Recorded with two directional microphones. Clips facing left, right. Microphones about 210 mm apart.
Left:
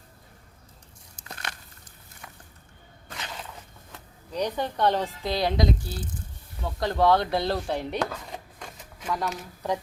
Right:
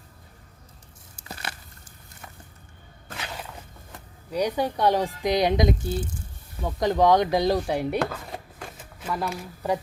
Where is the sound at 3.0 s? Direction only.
10° right (ahead or behind).